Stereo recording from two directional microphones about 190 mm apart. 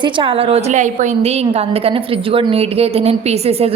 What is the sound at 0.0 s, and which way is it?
A woman's voice, 25° right (ahead or behind).